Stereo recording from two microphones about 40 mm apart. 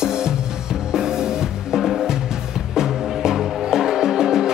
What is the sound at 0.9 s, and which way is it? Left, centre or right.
Music, centre.